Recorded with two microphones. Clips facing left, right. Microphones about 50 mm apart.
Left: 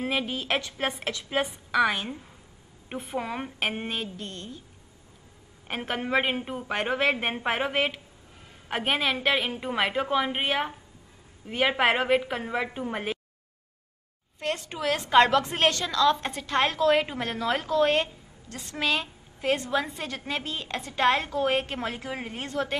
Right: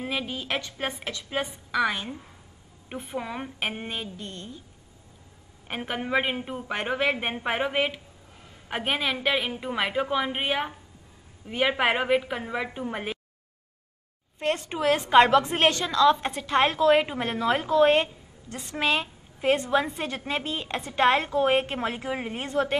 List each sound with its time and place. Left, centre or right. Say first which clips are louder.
0.0 s speech: left 2 dB; centre
5.7 s speech: even; centre
14.4 s a woman's voice: right 4 dB; right